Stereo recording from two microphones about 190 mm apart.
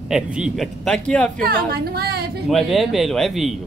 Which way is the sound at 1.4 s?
55° right (ahead or behind).